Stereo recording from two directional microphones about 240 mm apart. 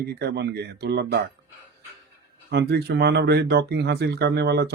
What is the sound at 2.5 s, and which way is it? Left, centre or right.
Speech, right.